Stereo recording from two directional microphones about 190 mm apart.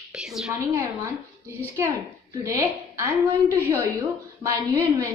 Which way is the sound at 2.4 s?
15° right (ahead or behind).